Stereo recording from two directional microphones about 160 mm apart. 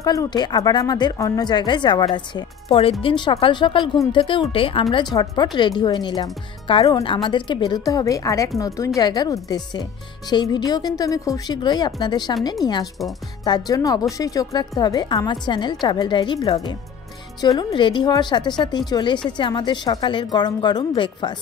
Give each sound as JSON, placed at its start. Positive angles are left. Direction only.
{"t": 0.0, "sound": "speech", "side_deg": 20}
{"t": 5.1, "sound": "speech", "side_deg": 25}